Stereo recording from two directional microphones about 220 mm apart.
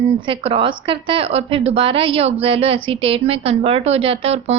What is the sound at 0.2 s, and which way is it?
A woman's voice, 25° right (ahead or behind).